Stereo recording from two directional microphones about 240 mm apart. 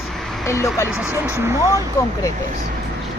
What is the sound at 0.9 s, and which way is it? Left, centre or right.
Speech, centre.